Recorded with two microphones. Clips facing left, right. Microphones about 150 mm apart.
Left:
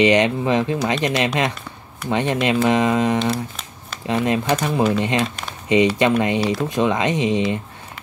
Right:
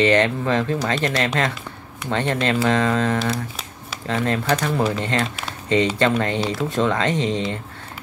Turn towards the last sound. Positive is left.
turn(degrees=15)  # may be behind; listen again after turning